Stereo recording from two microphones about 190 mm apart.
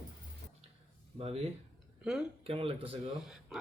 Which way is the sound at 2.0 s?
5° right (ahead or behind).